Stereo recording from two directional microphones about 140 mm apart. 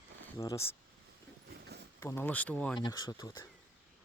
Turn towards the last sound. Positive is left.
turn(degrees=25)  # may be behind; listen again after turning